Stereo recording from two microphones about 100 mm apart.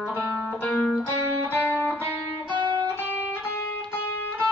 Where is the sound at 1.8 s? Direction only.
20° left (ahead or behind).